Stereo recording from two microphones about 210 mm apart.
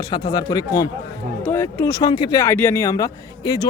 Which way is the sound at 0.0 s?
20° left (ahead or behind).